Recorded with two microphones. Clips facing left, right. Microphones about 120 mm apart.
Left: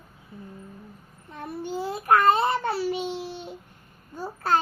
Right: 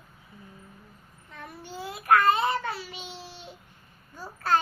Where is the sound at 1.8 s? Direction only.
35° left (ahead or behind).